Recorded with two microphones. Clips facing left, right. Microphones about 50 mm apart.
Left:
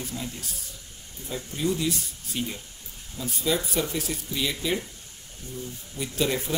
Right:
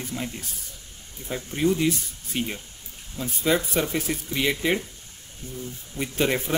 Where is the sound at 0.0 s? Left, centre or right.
Right.